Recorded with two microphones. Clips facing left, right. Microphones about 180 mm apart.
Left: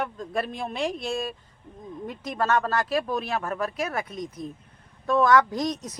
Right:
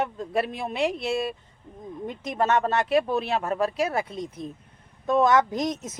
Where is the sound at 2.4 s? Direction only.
25° right (ahead or behind).